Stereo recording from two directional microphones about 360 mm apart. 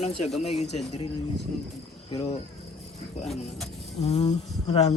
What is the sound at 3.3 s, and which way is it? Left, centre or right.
Speech, centre.